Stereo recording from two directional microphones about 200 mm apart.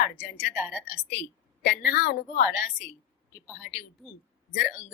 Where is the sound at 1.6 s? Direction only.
50° left (ahead or behind).